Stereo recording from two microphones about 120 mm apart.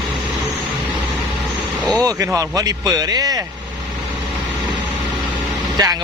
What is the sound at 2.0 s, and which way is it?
Speech, 30° right (ahead or behind).